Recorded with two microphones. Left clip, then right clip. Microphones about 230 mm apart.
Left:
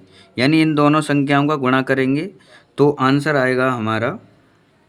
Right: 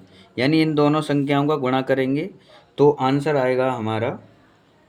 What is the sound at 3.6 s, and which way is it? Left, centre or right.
Speech, left.